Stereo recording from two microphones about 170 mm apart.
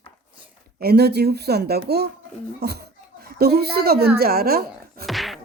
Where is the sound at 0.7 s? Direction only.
70° right (ahead or behind).